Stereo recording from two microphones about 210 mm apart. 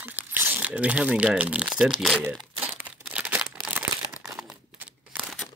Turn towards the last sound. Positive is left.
turn(degrees=-5)  # may be behind; listen again after turning